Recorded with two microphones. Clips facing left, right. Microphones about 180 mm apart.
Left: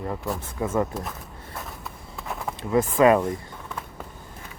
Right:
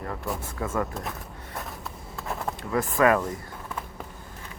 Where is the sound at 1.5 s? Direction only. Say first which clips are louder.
Right 1 dB; centre (ahead or behind).